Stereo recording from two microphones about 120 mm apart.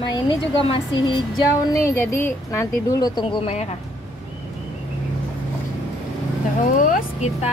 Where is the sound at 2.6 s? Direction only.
30° left (ahead or behind); by 3.6 s 55° left (ahead or behind).